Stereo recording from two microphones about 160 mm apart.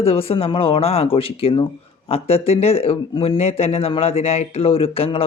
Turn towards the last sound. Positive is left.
turn(degrees=35)  # may be behind; listen again after turning